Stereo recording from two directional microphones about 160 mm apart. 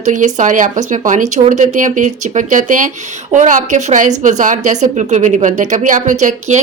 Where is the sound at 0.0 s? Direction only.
50° right (ahead or behind).